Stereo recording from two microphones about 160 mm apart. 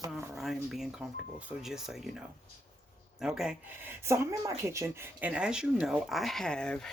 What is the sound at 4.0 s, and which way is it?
Speech, 20° right (ahead or behind).